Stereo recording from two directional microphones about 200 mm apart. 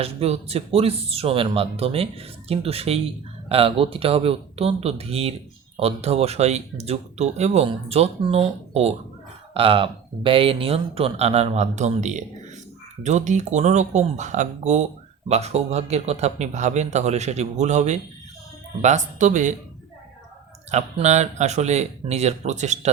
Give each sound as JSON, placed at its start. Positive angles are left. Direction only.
{"t": 0.0, "sound": "speech", "side_deg": -30}
{"t": 20.7, "sound": "speech", "side_deg": -35}